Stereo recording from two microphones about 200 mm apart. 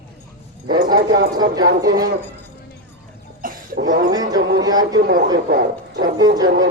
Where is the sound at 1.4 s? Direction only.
20° right (ahead or behind).